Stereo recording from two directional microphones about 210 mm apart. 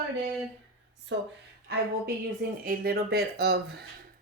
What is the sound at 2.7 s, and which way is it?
Speech, 50° right (ahead or behind).